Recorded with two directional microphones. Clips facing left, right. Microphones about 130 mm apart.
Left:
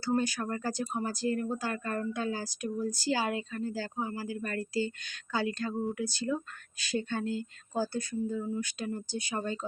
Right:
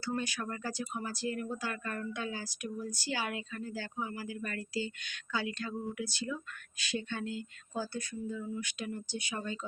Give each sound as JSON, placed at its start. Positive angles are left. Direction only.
{"t": 0.0, "sound": "speech", "side_deg": 40}